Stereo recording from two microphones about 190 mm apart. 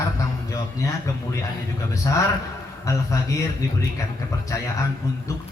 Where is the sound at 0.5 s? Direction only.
15° left (ahead or behind).